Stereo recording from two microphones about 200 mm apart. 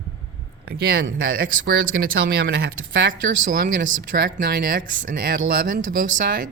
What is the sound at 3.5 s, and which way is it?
Speech, 45° right (ahead or behind).